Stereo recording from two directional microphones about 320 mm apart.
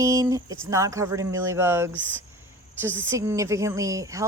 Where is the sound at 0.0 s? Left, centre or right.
Centre.